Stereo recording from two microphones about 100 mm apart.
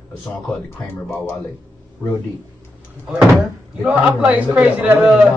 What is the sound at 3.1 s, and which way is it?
Speech, 10° right (ahead or behind).